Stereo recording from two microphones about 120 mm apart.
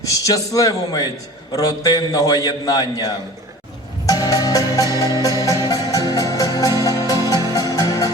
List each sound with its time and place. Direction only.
0.0 s a man's voice: 30° left (ahead or behind)
4.0 s music: 30° left (ahead or behind)